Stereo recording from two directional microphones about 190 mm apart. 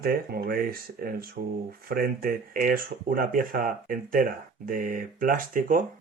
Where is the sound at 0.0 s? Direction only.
50° right (ahead or behind).